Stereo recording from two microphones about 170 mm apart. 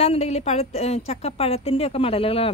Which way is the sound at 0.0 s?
35° left (ahead or behind).